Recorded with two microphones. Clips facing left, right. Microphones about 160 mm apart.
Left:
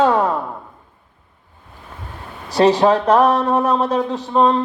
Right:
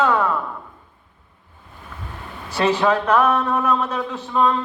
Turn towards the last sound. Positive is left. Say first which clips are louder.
# left 4 dB
turn(degrees=35)  # may be behind; listen again after turning